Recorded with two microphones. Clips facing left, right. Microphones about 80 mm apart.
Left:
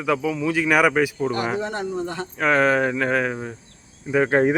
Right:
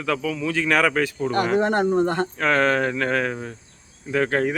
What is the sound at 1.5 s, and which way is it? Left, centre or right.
Speech, right.